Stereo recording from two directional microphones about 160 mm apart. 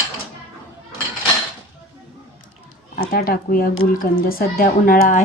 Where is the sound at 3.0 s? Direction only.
70° left (ahead or behind).